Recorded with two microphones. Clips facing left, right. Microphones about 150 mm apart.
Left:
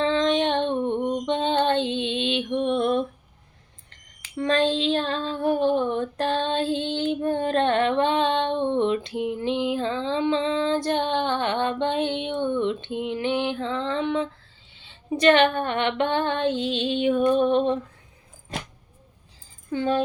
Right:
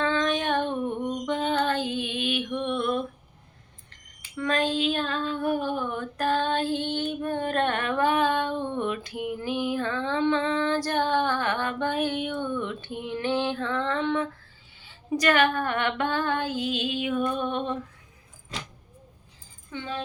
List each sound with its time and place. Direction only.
0.0 s female singing: 25° left (ahead or behind)
4.4 s child singing: 30° left (ahead or behind)
14.8 s female singing: 25° left (ahead or behind)
19.7 s speech: 45° left (ahead or behind)